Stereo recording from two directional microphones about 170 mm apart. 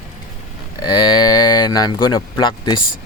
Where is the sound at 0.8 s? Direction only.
25° left (ahead or behind).